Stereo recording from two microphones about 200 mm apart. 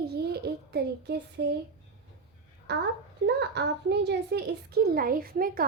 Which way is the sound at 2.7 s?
55° right (ahead or behind).